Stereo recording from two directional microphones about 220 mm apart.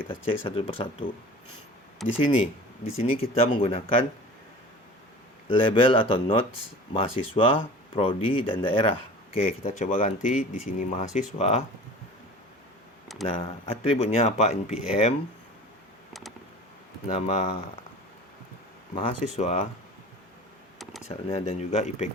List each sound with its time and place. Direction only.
0.0 s speech: 25° left (ahead or behind)
2.0 s speech: centre (ahead or behind)
3.0 s speech: 25° left (ahead or behind)
5.5 s speech: 25° left (ahead or behind)
13.2 s speech: 25° left (ahead or behind)
17.1 s speech: 30° left (ahead or behind)
19.0 s speech: 35° left (ahead or behind)
21.2 s speech: 30° left (ahead or behind)